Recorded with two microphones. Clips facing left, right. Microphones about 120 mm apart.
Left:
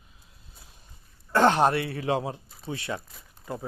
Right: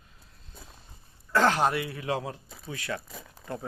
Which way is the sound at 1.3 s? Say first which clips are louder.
Left 3 dB; 25° left (ahead or behind).